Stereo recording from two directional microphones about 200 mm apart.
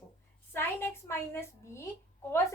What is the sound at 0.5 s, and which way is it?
A woman's voice, 10° left (ahead or behind).